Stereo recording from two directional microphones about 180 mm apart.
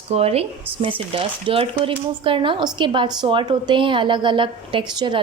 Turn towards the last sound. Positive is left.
turn(degrees=-25)  # may be behind; listen again after turning